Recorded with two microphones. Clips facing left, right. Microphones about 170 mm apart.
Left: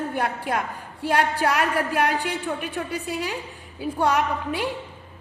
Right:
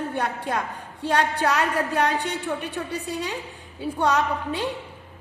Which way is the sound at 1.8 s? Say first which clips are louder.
Even; 25° right (ahead or behind).